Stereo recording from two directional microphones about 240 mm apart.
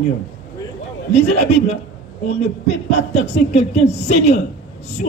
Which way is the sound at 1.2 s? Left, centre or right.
Left.